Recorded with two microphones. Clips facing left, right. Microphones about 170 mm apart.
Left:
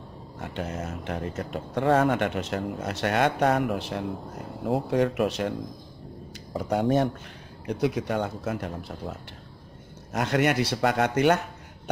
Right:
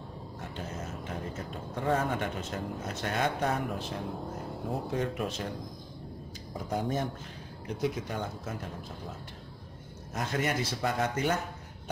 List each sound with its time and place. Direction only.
0.4 s speech: 70° left (ahead or behind)
6.5 s speech: 70° left (ahead or behind)
10.1 s speech: 75° left (ahead or behind)